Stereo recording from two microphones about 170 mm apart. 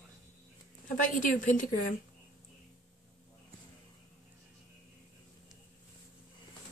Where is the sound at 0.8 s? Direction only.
50° left (ahead or behind).